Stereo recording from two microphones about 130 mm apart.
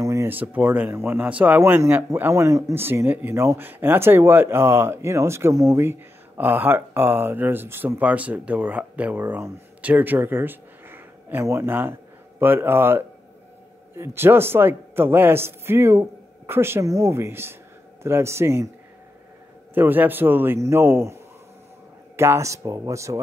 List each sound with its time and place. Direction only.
0.0 s a man's voice: 25° right (ahead or behind)
19.7 s a man's voice: 15° right (ahead or behind)